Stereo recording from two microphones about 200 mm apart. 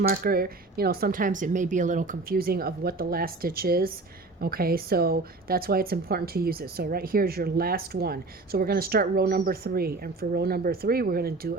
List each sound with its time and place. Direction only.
0.1 s a woman's voice: 50° right (ahead or behind)